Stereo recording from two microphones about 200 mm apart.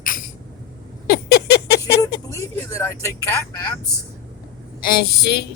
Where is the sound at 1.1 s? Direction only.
55° left (ahead or behind).